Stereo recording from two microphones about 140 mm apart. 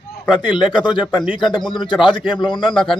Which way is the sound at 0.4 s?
35° left (ahead or behind).